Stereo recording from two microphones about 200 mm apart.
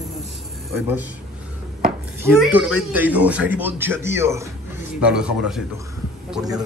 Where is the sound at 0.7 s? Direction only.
10° right (ahead or behind).